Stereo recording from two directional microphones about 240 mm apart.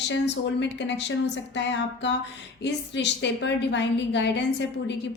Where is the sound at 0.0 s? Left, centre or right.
Left.